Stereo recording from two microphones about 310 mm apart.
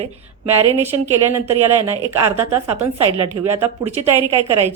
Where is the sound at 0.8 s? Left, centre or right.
Centre.